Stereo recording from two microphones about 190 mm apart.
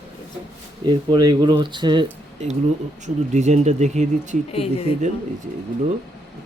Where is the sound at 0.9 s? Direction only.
25° right (ahead or behind).